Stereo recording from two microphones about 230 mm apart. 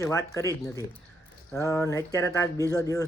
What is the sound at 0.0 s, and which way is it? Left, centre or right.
Speech, centre.